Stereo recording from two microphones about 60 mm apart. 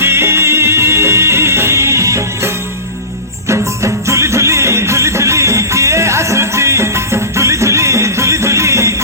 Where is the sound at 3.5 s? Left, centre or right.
Right.